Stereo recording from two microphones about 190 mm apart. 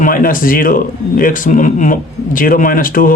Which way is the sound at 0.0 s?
45° left (ahead or behind).